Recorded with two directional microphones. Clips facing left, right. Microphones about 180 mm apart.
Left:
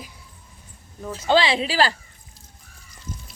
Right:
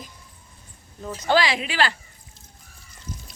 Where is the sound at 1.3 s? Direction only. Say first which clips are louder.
Left 2 dB; 30° left (ahead or behind).